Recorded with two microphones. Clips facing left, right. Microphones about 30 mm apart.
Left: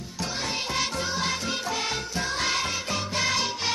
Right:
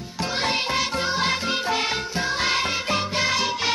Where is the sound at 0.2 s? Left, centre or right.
Right.